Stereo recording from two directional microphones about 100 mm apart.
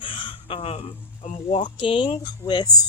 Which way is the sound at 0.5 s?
90° left.